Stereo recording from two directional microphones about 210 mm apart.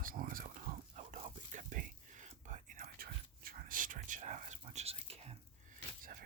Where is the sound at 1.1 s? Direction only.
35° right (ahead or behind).